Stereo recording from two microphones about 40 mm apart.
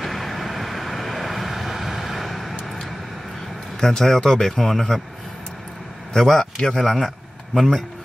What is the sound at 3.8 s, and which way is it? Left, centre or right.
A man's voice, centre.